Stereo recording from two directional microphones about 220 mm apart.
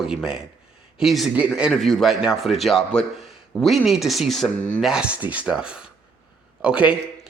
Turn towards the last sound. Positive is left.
turn(degrees=-5)  # may be behind; listen again after turning